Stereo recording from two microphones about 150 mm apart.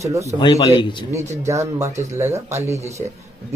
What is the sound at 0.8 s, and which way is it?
Speech, 30° left (ahead or behind).